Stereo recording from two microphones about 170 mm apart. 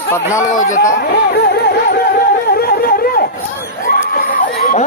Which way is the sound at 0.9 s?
70° left (ahead or behind).